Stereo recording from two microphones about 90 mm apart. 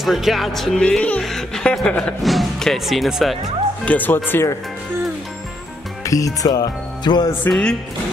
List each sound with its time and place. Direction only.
0.0 s speech: centre (ahead or behind)
0.8 s speech: 15° left (ahead or behind); by 3.3 s centre (ahead or behind)
3.8 s speech: 20° left (ahead or behind)
6.0 s music: 40° left (ahead or behind)
7.4 s speech: 10° left (ahead or behind)